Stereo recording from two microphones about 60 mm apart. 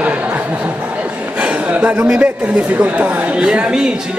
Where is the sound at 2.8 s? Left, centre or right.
Right.